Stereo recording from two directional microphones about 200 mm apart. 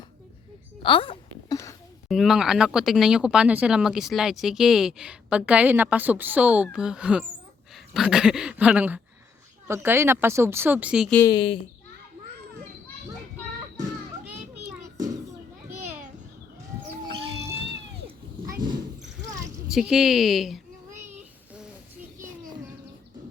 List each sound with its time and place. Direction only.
0.8 s a sound: 25° left (ahead or behind)
2.0 s speech: centre (ahead or behind)
11.3 s speech: 25° left (ahead or behind)
14.8 s children playing: 20° right (ahead or behind)
18.4 s a sound: 15° right (ahead or behind)
19.7 s speech: centre (ahead or behind)